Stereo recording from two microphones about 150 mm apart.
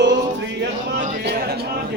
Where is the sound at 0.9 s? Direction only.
75° right (ahead or behind); by 1.7 s 90° right.